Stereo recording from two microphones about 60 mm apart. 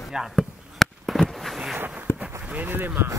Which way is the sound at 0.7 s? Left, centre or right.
Centre.